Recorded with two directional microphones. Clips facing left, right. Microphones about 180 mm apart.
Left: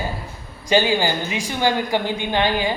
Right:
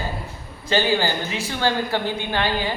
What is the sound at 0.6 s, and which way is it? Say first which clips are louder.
A woman's voice: left 2 dB; 15° left (ahead or behind).